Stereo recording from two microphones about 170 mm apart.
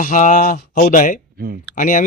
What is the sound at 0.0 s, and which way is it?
Speech, 50° left (ahead or behind).